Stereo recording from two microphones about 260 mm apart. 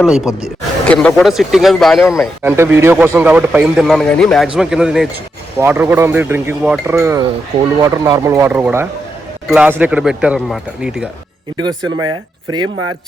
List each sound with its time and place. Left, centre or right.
0.0 s speech: centre
11.5 s speech: centre